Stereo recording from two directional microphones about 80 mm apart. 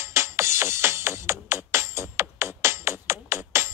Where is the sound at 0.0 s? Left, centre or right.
Right.